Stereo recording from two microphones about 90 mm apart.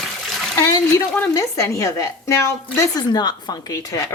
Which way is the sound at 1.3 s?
35° left (ahead or behind).